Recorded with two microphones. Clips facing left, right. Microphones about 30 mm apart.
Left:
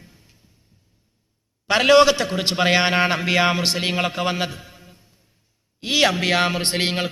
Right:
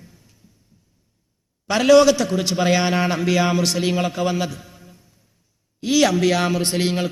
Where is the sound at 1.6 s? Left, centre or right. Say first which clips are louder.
Right 1 dB; left.